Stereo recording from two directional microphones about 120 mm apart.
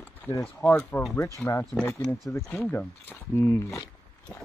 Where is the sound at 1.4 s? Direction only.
5° left (ahead or behind).